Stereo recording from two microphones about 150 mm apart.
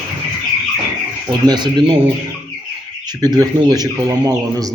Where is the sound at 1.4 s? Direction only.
30° right (ahead or behind).